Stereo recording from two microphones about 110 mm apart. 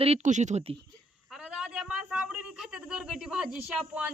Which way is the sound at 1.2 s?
5° right (ahead or behind).